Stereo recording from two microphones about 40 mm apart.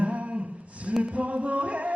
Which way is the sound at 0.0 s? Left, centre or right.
Right.